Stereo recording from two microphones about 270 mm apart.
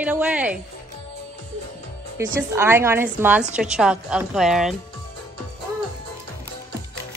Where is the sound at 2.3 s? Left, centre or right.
Centre.